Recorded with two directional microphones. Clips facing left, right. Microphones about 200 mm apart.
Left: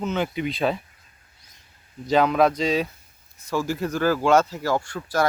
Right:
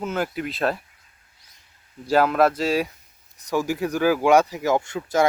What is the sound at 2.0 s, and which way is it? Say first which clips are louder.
Speech: even; 5° right (ahead or behind).